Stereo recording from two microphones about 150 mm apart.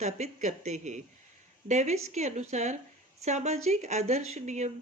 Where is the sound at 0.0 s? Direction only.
50° right (ahead or behind).